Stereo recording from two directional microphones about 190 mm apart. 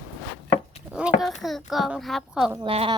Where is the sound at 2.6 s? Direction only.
30° right (ahead or behind).